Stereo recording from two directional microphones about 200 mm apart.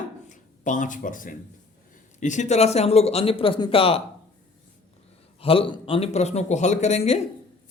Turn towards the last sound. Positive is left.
turn(degrees=35)  # may be behind; listen again after turning